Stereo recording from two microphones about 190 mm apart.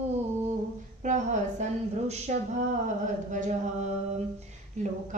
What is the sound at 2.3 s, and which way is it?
Speech, 40° right (ahead or behind).